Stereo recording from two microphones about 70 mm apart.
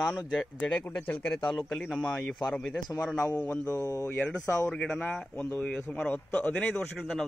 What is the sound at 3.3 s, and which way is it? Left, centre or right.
Mantra, left.